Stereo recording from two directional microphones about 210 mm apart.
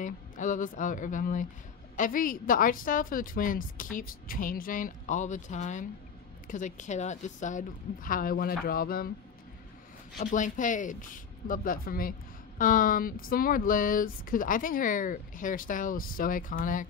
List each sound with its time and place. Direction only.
0.0 s speech: 35° left (ahead or behind)
10.2 s speech: 35° left (ahead or behind)